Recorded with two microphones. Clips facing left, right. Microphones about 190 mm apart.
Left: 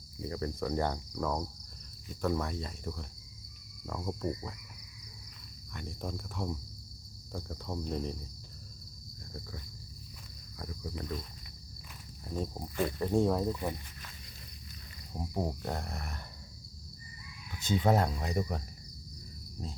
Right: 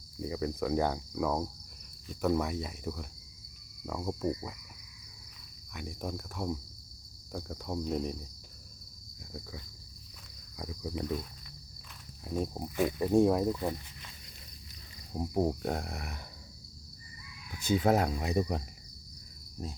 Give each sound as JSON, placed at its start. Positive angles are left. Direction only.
{"t": 0.3, "sound": "speech", "side_deg": -5}
{"t": 5.7, "sound": "speech", "side_deg": -10}
{"t": 10.6, "sound": "cricket", "side_deg": -5}
{"t": 12.2, "sound": "speech", "side_deg": -10}
{"t": 15.1, "sound": "speech", "side_deg": -10}
{"t": 17.6, "sound": "speech", "side_deg": -10}
{"t": 18.3, "sound": "cricket", "side_deg": -20}